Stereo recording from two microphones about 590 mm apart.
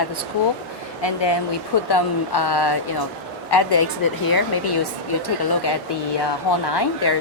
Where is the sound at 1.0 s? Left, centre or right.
Left.